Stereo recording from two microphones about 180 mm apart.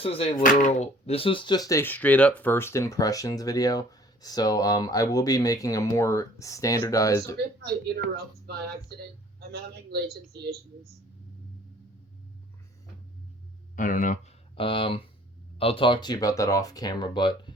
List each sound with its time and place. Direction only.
0.0 s speech: 35° left (ahead or behind); by 7.3 s 20° left (ahead or behind)
7.9 s a man's voice: 65° right (ahead or behind)
13.7 s speech: 45° left (ahead or behind)
14.5 s speech: 30° left (ahead or behind)